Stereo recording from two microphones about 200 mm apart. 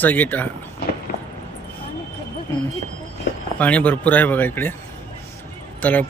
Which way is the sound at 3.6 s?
5° left (ahead or behind).